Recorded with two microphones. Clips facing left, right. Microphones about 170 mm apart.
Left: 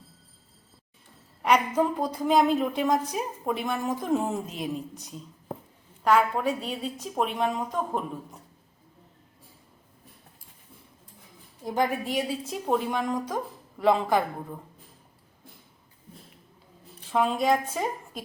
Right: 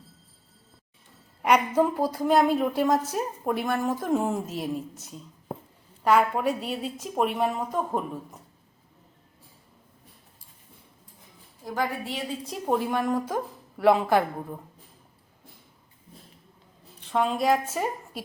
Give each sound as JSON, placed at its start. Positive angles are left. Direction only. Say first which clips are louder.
{"t": 1.4, "sound": "a woman's voice", "louder": "right 1 dB", "side_deg": -10}
{"t": 11.6, "sound": "a woman's voice", "louder": "left 3 dB", "side_deg": 20}
{"t": 12.5, "sound": "a woman's voice", "louder": "right 1 dB", "side_deg": 0}
{"t": 17.1, "sound": "a woman's voice", "louder": "even", "side_deg": 0}